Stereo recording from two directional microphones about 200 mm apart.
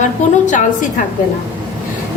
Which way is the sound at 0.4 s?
40° left (ahead or behind).